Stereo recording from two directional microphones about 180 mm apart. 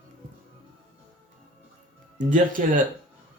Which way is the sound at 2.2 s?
45° right (ahead or behind).